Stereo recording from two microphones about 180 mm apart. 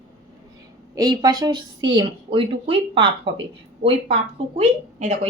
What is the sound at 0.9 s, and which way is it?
A woman's voice, 20° right (ahead or behind).